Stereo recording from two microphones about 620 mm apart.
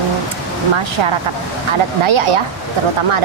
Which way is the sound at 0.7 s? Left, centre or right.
Right.